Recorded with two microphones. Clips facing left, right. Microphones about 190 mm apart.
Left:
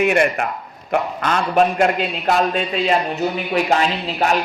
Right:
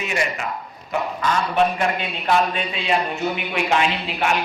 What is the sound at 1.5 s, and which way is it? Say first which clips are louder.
A man's voice: left 6 dB; 45° left (ahead or behind).